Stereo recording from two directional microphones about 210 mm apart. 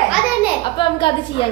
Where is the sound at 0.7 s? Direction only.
25° left (ahead or behind).